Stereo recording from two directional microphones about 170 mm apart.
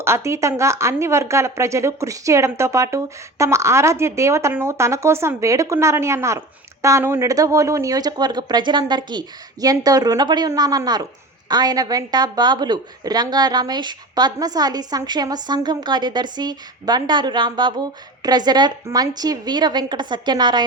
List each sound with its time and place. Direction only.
0.0 s a woman's voice: 15° right (ahead or behind)